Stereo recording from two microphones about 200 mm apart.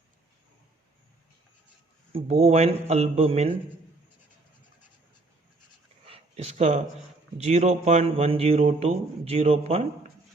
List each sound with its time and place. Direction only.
2.1 s a man's voice: 30° right (ahead or behind)
6.1 s a sound: 30° right (ahead or behind)
7.3 s a man's voice: 35° right (ahead or behind)